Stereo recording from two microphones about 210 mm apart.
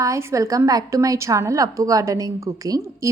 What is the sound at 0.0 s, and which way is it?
Speech, 15° right (ahead or behind).